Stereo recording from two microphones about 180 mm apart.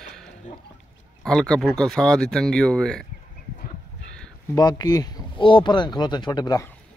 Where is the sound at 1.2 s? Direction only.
5° left (ahead or behind).